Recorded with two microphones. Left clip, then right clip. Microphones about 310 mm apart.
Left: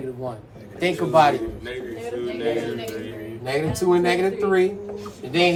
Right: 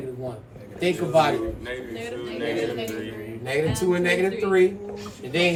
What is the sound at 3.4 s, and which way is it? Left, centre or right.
Speech, centre.